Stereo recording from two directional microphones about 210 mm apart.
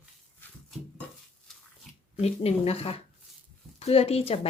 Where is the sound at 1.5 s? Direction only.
Centre (ahead or behind).